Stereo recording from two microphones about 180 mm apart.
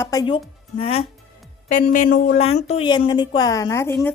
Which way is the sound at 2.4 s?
35° left (ahead or behind).